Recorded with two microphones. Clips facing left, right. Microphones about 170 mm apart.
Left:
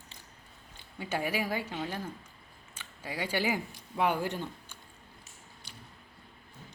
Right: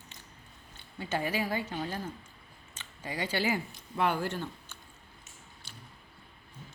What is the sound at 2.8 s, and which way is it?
Speech, 10° left (ahead or behind).